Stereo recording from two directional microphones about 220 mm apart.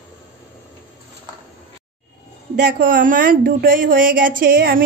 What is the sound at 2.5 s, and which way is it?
A woman's voice, 45° right (ahead or behind).